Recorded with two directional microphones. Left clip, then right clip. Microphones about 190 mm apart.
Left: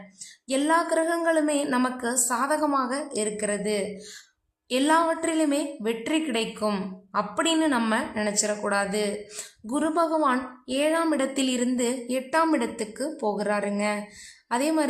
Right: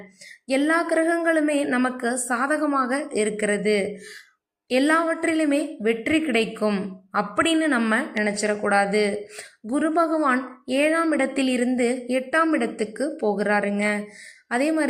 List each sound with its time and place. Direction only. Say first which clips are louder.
0.4 s a woman's voice: right 2 dB; 10° right (ahead or behind)